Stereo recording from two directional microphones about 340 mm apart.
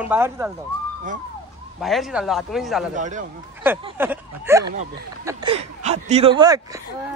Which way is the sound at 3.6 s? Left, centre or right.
Centre.